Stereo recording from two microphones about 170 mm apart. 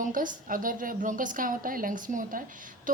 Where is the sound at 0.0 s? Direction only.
50° right (ahead or behind).